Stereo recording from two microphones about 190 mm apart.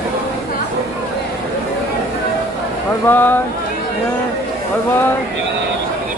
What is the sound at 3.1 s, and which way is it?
Speech, 10° left (ahead or behind).